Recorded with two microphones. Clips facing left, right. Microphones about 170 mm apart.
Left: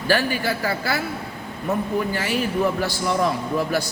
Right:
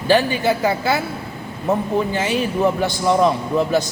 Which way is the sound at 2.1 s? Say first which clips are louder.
Right 3 dB; 20° right (ahead or behind).